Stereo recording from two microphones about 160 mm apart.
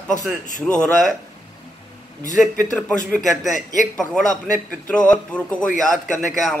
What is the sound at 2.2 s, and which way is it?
A man's voice, 55° left (ahead or behind).